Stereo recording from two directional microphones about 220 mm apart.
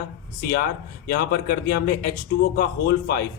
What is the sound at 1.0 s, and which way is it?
Speech, 45° left (ahead or behind).